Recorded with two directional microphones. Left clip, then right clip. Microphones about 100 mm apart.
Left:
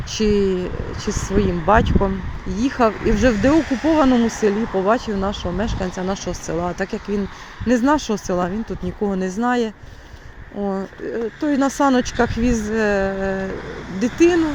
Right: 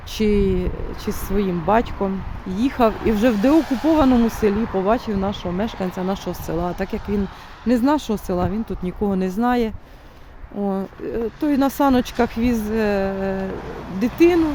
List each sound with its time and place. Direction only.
0.1 s speech: 40° right (ahead or behind)
2.6 s speech: 45° right (ahead or behind)
9.0 s speech: 60° right (ahead or behind); by 14.5 s 35° right (ahead or behind)